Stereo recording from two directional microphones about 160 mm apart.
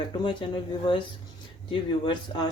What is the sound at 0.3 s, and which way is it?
Speech, 30° left (ahead or behind).